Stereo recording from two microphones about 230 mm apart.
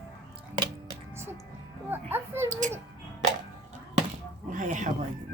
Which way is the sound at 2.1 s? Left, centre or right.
Centre.